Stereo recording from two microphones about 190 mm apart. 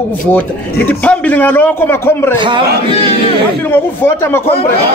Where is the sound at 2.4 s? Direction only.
25° right (ahead or behind).